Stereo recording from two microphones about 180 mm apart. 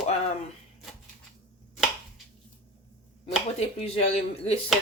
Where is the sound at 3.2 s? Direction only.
35° left (ahead or behind).